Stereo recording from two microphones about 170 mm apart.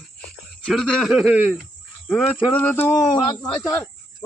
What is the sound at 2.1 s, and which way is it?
A man's voice, 10° left (ahead or behind).